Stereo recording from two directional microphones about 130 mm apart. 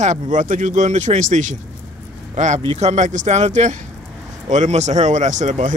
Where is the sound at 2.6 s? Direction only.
55° right (ahead or behind).